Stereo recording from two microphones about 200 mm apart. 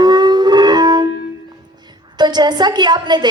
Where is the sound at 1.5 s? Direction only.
20° right (ahead or behind).